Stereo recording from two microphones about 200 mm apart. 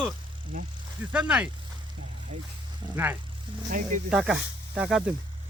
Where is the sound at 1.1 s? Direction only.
5° right (ahead or behind).